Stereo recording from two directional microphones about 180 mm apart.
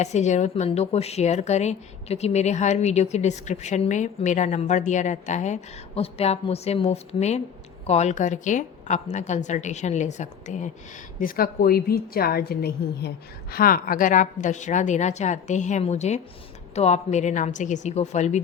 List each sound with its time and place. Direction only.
0.0 s speech: 40° left (ahead or behind)
11.2 s a woman's voice: 55° left (ahead or behind)